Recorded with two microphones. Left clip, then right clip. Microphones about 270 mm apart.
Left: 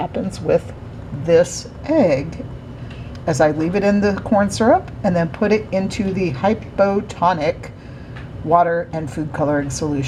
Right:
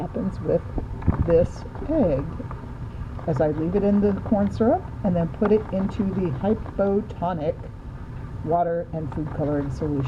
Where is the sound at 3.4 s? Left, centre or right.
Left.